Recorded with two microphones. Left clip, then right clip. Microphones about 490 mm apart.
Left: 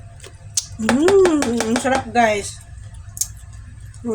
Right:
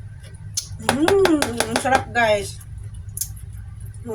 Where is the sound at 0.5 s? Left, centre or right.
Right.